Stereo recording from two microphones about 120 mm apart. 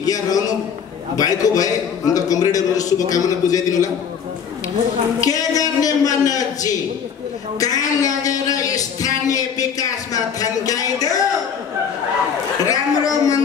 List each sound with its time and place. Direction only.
0.0 s a man's voice: 30° left (ahead or behind)
5.2 s a man's voice: 30° left (ahead or behind)
12.6 s speech: 30° left (ahead or behind)